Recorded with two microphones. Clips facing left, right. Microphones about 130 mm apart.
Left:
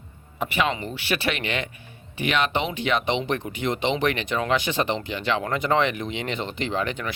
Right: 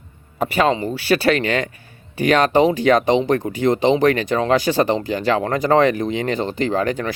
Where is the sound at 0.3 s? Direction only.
40° right (ahead or behind).